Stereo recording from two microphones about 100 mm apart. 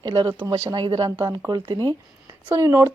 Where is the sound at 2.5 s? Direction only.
30° right (ahead or behind).